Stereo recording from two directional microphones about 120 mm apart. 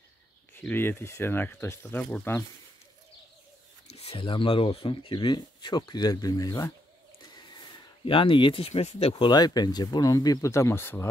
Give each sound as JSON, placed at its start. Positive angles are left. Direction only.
{"t": 0.6, "sound": "speech", "side_deg": 20}
{"t": 3.9, "sound": "speech", "side_deg": 55}
{"t": 7.3, "sound": "speech", "side_deg": 40}
{"t": 9.3, "sound": "speech", "side_deg": 35}